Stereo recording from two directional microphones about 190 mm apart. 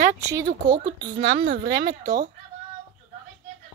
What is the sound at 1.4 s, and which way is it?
Speech, 55° right (ahead or behind).